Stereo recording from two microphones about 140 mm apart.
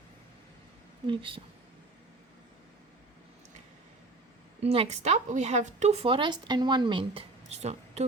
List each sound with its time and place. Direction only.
1.0 s a woman's voice: 35° right (ahead or behind)
4.6 s a woman's voice: 45° right (ahead or behind)